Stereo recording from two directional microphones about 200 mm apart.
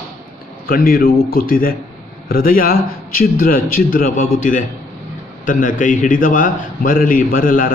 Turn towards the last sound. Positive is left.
turn(degrees=45)  # may be behind; listen again after turning